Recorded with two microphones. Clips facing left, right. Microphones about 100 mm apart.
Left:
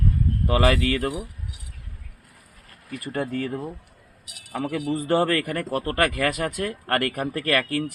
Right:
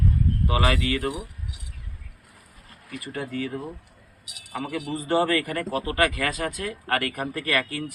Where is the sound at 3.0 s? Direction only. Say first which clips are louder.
Left 4 dB; 45° left (ahead or behind).